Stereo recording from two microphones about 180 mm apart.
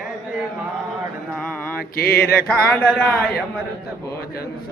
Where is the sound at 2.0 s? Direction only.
60° left (ahead or behind).